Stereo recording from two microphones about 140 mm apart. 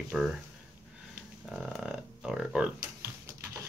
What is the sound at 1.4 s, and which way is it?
Speech, centre (ahead or behind).